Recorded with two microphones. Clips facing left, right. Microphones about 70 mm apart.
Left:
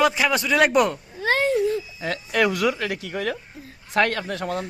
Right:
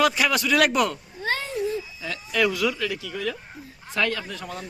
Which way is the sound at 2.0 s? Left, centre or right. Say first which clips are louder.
Left 2 dB; left.